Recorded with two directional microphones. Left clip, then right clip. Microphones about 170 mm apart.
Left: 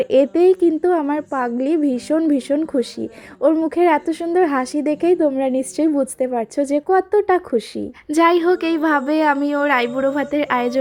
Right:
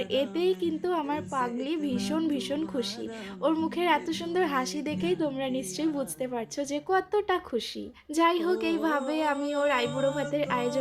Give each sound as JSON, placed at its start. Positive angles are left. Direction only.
{"t": 0.0, "sound": "a woman's voice", "side_deg": 40}
{"t": 8.1, "sound": "a woman's voice", "side_deg": 40}